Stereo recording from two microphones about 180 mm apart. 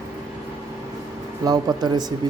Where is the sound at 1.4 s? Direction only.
20° right (ahead or behind).